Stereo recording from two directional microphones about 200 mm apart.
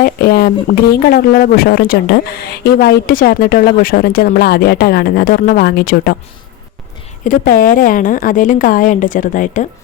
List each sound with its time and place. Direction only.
0.0 s speech: 50° left (ahead or behind)
7.3 s a woman's voice: 45° left (ahead or behind)